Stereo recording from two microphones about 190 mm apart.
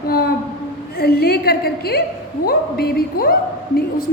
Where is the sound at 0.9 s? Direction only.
55° left (ahead or behind).